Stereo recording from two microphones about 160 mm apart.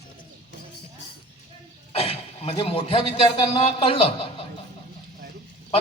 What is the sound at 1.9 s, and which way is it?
A man's voice, 40° left (ahead or behind).